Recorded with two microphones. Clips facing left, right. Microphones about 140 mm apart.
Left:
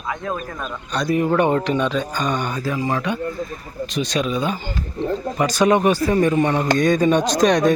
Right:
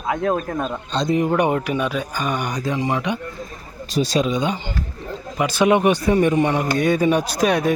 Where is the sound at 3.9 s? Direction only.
30° right (ahead or behind); by 7.7 s 10° right (ahead or behind).